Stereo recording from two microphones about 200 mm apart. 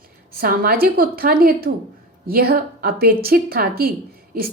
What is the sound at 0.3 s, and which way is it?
A woman's voice, 50° right (ahead or behind).